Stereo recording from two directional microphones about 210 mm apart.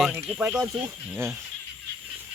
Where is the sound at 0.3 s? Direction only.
5° right (ahead or behind).